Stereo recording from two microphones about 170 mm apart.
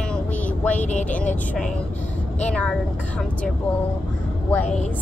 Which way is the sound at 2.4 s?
5° left (ahead or behind).